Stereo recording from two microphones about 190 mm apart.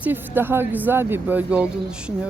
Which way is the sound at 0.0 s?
10° right (ahead or behind).